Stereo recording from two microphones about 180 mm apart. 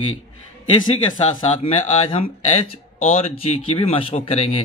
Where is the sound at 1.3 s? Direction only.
35° left (ahead or behind).